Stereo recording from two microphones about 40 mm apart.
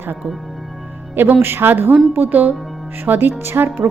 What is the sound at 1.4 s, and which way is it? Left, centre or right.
Speech, right.